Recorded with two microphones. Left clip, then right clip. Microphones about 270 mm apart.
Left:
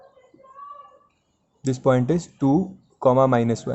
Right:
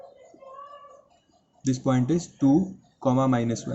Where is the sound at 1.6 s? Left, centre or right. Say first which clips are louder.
Left 6 dB; left.